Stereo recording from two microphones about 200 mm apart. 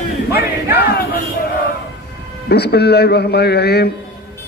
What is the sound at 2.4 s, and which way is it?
A man's voice, 55° left (ahead or behind).